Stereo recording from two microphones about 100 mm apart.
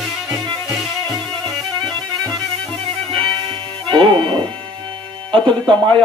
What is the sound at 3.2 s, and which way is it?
Music, 55° right (ahead or behind).